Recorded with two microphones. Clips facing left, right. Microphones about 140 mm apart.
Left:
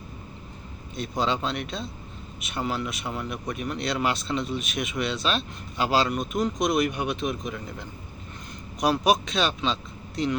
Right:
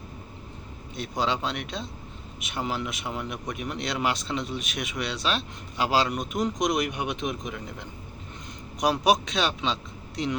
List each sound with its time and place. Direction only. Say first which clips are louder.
0.9 s speech: left 1 dB; 10° right (ahead or behind)